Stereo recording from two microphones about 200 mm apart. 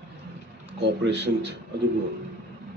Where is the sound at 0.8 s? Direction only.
60° right (ahead or behind).